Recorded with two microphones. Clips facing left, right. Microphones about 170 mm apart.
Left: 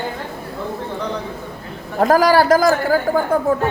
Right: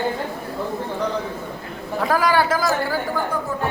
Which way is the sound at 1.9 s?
45° left (ahead or behind).